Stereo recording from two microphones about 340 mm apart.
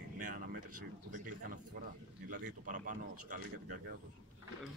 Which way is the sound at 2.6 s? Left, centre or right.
Right.